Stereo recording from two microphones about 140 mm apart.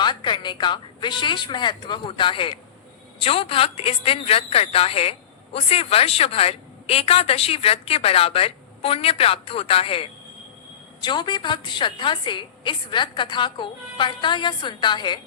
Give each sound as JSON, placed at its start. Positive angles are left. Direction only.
{"t": 0.0, "sound": "a woman's voice", "side_deg": 35}